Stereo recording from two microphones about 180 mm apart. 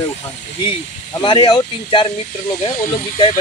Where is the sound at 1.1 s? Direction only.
25° left (ahead or behind).